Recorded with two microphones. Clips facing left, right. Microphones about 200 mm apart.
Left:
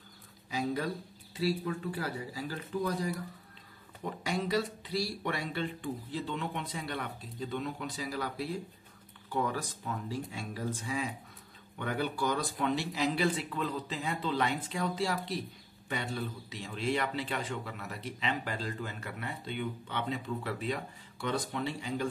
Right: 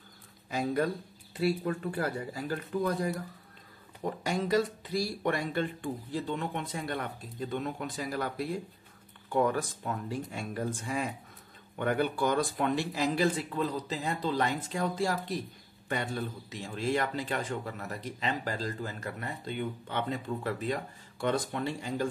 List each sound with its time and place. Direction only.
0.5 s a man's voice: 50° right (ahead or behind)